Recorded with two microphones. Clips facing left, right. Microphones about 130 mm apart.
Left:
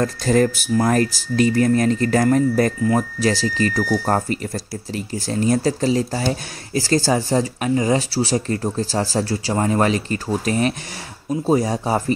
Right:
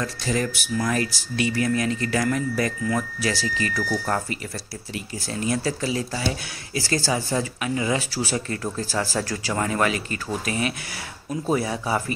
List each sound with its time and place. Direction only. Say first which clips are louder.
0.0 s speech: left 8 dB; 45° left (ahead or behind)